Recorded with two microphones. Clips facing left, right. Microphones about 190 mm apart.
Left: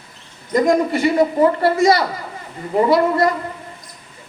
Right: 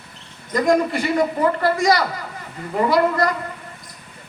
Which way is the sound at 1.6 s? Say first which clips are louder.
Left 3 dB; 25° left (ahead or behind).